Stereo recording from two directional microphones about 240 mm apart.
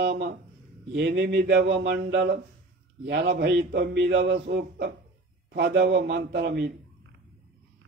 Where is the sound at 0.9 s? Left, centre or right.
Right.